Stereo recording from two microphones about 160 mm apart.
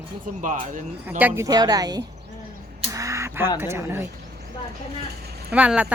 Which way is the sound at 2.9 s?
20° right (ahead or behind).